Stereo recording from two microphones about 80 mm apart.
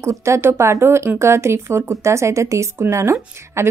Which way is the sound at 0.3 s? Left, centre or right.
Right.